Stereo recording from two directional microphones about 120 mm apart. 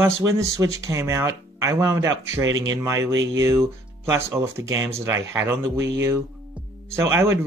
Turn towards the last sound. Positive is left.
turn(degrees=-25)  # may be behind; listen again after turning